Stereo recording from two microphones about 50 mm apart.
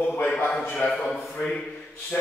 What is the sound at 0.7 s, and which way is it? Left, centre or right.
Speech, left.